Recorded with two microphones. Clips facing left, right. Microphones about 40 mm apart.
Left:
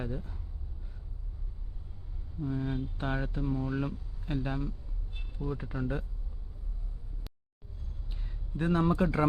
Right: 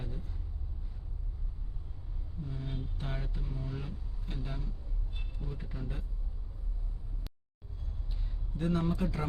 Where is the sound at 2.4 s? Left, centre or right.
Left.